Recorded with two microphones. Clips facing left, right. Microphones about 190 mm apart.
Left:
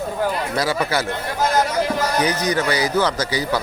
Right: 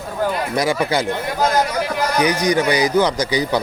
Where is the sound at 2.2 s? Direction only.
15° right (ahead or behind).